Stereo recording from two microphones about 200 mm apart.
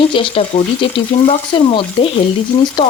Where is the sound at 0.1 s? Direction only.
25° left (ahead or behind).